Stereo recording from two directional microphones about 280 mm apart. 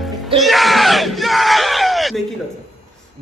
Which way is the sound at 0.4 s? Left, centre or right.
Centre.